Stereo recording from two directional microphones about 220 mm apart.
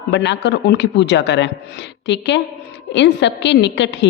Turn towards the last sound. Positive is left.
turn(degrees=55)  # may be behind; listen again after turning